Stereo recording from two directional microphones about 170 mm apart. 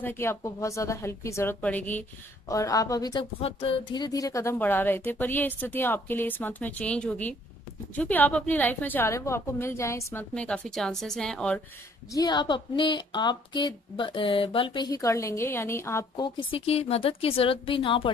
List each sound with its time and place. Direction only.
0.0 s a woman's voice: 15° left (ahead or behind)
3.3 s a woman's voice: 35° left (ahead or behind); by 11.6 s 5° left (ahead or behind)
12.1 s a woman's voice: 25° left (ahead or behind)
16.3 s a woman's voice: 30° left (ahead or behind)